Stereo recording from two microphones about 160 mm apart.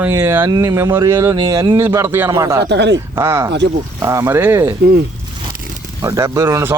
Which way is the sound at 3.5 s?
90° right.